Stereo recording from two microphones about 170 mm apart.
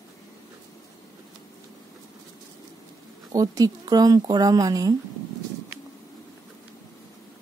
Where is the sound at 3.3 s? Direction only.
20° right (ahead or behind).